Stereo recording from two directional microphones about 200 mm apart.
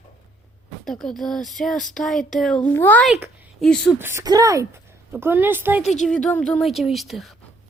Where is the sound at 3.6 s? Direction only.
5° left (ahead or behind).